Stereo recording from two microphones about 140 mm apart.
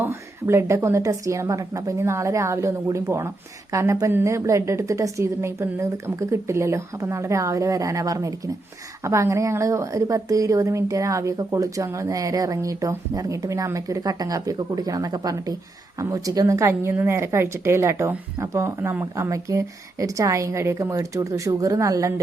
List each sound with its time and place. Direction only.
0.0 s a woman's voice: 20° right (ahead or behind)